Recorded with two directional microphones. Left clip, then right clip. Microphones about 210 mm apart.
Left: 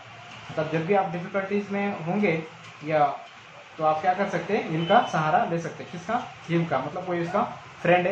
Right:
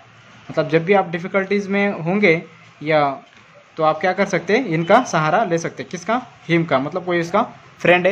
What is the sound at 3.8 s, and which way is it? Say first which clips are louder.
Speech: right 6 dB; 65° right (ahead or behind).